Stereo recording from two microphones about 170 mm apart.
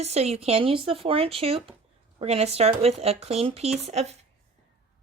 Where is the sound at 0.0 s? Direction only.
40° right (ahead or behind).